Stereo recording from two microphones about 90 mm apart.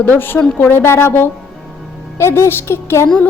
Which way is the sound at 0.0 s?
20° left (ahead or behind).